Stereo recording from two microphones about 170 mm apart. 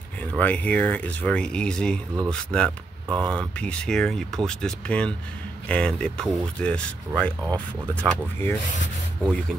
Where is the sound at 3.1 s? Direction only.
25° right (ahead or behind).